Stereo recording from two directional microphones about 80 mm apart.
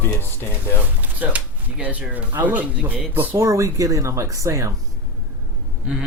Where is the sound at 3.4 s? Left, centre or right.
Right.